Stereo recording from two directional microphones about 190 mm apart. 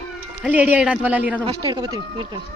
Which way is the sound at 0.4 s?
5° right (ahead or behind).